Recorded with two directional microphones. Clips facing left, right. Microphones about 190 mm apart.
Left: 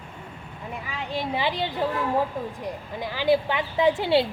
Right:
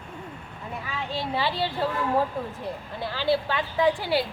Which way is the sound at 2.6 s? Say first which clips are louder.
Left 1 dB; 15° left (ahead or behind).